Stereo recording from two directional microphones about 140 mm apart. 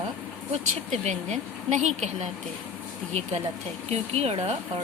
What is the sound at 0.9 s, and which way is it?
Speech, 55° right (ahead or behind).